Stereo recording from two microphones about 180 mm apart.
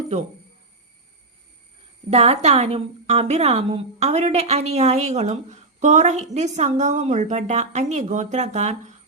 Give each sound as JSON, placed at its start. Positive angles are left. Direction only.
{"t": 2.0, "sound": "a woman's voice", "side_deg": -35}